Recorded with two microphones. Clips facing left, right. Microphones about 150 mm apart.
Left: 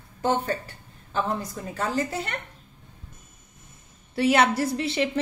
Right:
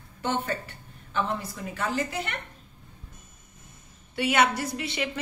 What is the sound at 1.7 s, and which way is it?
Speech, 35° left (ahead or behind).